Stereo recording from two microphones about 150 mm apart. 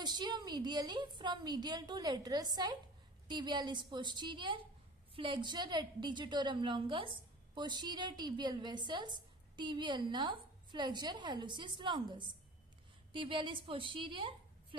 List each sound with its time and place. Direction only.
0.0 s a woman's voice: 30° right (ahead or behind)